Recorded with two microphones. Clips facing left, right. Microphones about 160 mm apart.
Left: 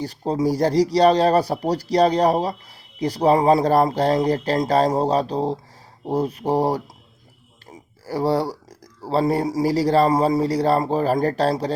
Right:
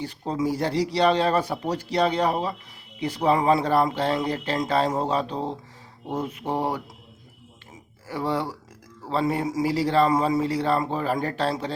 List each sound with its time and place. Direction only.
0.0 s speech: 35° left (ahead or behind)
7.7 s a sound: 35° left (ahead or behind)
9.0 s speech: 35° left (ahead or behind)